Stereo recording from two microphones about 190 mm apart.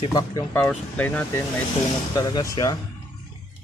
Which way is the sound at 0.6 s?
5° left (ahead or behind).